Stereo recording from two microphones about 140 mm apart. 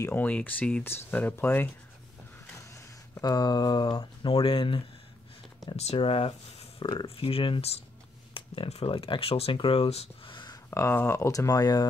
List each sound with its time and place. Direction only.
0.0 s speech: 10° left (ahead or behind)
2.7 s speech: 25° left (ahead or behind)
10.7 s speech: 20° left (ahead or behind)